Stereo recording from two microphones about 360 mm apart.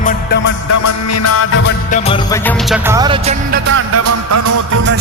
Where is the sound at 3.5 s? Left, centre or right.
Right.